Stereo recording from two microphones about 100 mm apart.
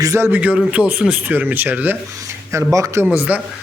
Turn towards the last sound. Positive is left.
turn(degrees=-15)  # may be behind; listen again after turning